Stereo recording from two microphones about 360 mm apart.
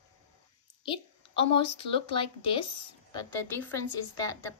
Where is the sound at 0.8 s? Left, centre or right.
Centre.